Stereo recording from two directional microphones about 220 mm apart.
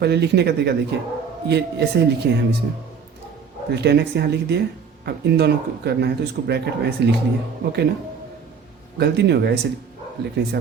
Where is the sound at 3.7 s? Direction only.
50° right (ahead or behind).